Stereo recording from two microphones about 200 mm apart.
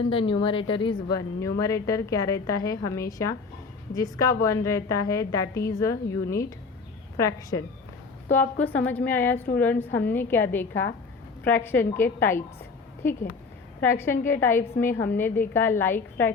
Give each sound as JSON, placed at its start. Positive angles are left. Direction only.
{"t": 0.1, "sound": "a woman's voice", "side_deg": 25}